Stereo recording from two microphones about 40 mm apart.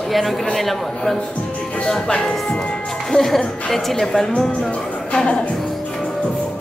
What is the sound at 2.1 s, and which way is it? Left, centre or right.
Speech, left.